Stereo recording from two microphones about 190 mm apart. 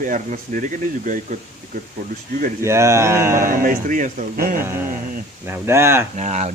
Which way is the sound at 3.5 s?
45° right (ahead or behind).